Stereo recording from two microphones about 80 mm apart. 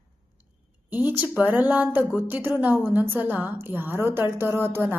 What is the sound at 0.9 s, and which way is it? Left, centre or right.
A woman's voice, right.